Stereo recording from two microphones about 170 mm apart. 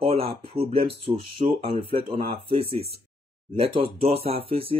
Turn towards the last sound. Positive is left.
turn(degrees=-35)  # may be behind; listen again after turning